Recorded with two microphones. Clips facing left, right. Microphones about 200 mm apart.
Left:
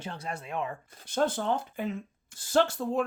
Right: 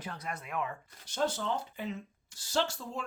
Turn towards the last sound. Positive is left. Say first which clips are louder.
# left 8 dB
turn(degrees=55)  # may be behind; listen again after turning